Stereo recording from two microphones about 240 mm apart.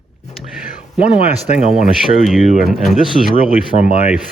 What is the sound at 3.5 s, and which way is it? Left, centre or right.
Speech, left.